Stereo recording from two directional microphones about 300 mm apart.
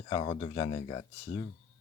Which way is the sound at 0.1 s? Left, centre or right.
Centre.